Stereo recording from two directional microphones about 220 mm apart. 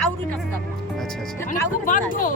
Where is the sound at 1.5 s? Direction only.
35° left (ahead or behind).